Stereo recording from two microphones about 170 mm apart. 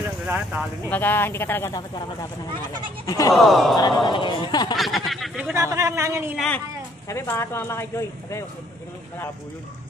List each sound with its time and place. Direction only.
0.3 s speech: 5° right (ahead or behind)
0.8 s speech: 10° left (ahead or behind)
3.1 s a man's voice: 20° left (ahead or behind)
3.3 s speech: centre (ahead or behind)
4.1 s a man's voice: 30° left (ahead or behind)
4.7 s speech: centre (ahead or behind)
5.6 s speech: 20° right (ahead or behind)
6.3 s speech: 5° left (ahead or behind)
7.1 s speech: 15° left (ahead or behind)